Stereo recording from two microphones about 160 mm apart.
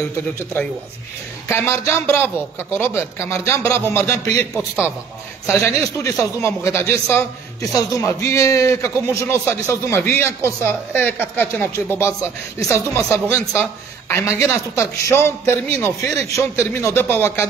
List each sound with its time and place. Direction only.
1.5 s a man's voice: 15° left (ahead or behind)